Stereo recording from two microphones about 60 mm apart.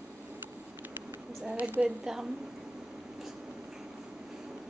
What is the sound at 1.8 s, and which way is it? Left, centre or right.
Speech, centre.